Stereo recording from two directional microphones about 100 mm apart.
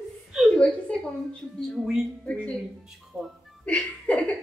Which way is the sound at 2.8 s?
5° right (ahead or behind).